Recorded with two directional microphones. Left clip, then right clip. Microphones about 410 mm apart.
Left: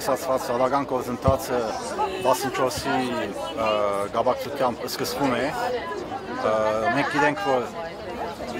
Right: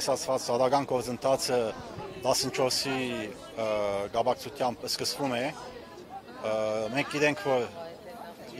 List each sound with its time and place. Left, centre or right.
0.0 s speech: right
6.5 s speech: right